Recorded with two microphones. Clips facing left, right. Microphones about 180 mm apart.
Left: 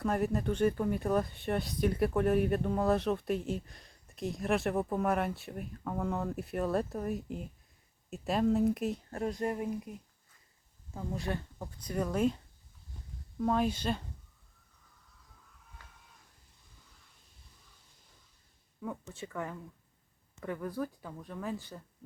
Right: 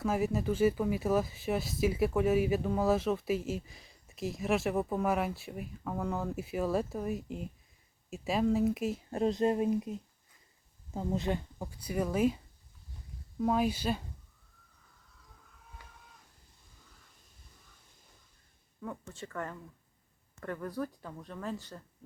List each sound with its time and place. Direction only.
0.0 s speech: centre (ahead or behind)
9.0 s speech: 20° right (ahead or behind); by 12.4 s 5° right (ahead or behind)
13.4 s speech: 5° right (ahead or behind)
15.8 s a sound: 15° right (ahead or behind)
19.0 s speech: 15° left (ahead or behind)